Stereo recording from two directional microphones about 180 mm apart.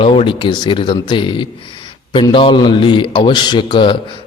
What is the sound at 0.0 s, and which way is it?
A man's voice, 30° left (ahead or behind).